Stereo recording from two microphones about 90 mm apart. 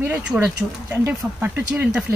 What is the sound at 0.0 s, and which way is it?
Speech, 15° right (ahead or behind).